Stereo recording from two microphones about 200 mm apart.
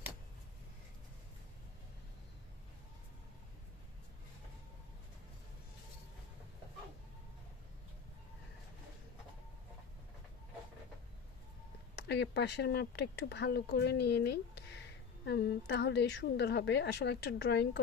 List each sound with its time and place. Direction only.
12.1 s speech: 55° left (ahead or behind)